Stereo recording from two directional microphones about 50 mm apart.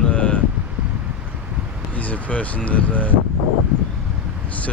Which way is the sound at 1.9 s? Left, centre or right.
Left.